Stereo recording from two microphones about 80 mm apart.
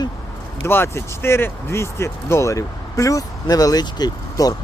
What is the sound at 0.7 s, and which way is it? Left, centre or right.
Speech, left.